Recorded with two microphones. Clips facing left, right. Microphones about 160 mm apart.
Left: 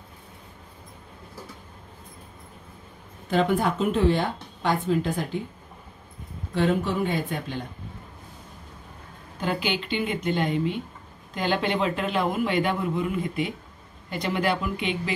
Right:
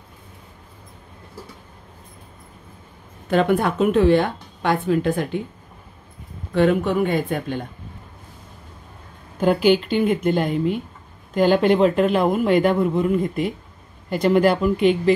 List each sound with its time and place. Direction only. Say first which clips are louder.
3.3 s a woman's voice: right 4 dB; 60° right (ahead or behind)
6.5 s a woman's voice: right 6 dB; 55° right (ahead or behind)
9.4 s speech: right 11 dB; 50° right (ahead or behind)